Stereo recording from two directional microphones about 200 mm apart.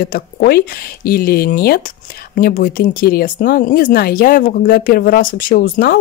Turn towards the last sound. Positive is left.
turn(degrees=45)  # may be behind; listen again after turning